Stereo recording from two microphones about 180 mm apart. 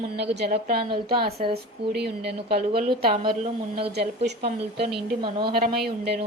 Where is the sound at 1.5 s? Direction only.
65° right (ahead or behind).